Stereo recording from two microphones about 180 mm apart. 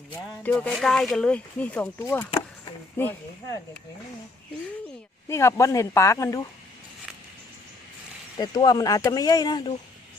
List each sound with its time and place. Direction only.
0.1 s speech: 10° left (ahead or behind)
5.3 s speech: 15° left (ahead or behind)
8.4 s speech: 25° left (ahead or behind)